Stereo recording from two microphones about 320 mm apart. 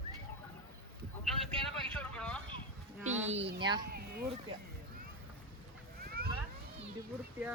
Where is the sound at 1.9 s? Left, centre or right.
Centre.